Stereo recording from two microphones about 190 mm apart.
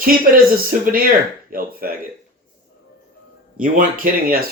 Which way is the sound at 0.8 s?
50° right (ahead or behind).